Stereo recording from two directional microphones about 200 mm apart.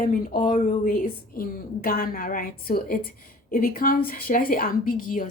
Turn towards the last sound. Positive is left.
turn(degrees=45)  # may be behind; listen again after turning